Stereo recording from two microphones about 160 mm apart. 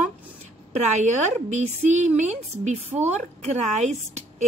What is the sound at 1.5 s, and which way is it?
A woman's voice, 45° right (ahead or behind).